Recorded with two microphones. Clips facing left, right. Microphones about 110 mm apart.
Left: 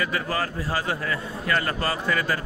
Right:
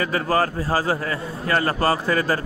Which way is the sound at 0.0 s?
35° right (ahead or behind).